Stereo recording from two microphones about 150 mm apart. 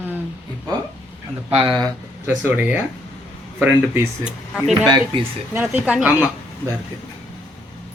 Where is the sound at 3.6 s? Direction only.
10° right (ahead or behind).